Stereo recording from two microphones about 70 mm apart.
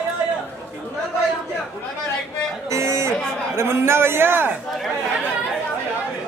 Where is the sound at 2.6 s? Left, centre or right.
Right.